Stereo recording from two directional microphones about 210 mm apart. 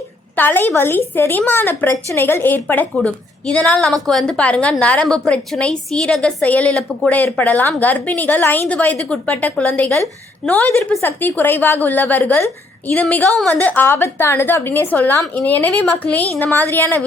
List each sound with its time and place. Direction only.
0.3 s a woman's voice: 10° left (ahead or behind)